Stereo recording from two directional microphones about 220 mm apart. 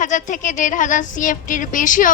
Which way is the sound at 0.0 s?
35° left (ahead or behind).